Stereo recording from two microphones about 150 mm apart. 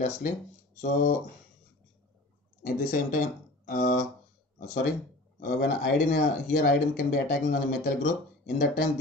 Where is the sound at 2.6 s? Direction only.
60° left (ahead or behind).